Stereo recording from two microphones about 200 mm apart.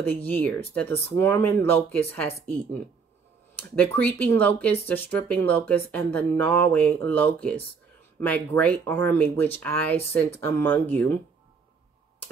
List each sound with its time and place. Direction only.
0.0 s speech: 10° left (ahead or behind)